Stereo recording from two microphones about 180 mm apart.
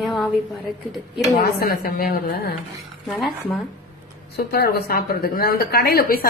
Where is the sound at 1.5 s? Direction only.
55° left (ahead or behind).